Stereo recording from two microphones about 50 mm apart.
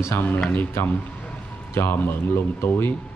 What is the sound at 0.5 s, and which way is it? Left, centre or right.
Speech, left.